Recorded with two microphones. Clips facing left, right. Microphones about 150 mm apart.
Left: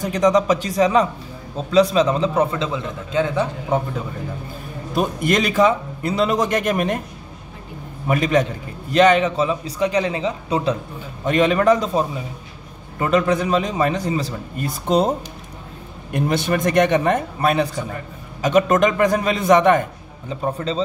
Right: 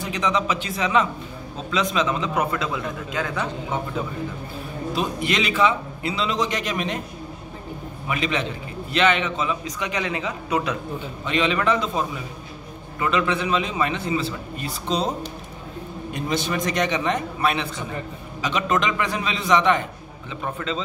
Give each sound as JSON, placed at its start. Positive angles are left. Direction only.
{"t": 0.0, "sound": "a man's voice", "side_deg": 45}
{"t": 4.9, "sound": "a man's voice", "side_deg": 45}
{"t": 8.1, "sound": "a man's voice", "side_deg": 45}
{"t": 11.2, "sound": "a man's voice", "side_deg": 45}
{"t": 16.1, "sound": "a man's voice", "side_deg": 60}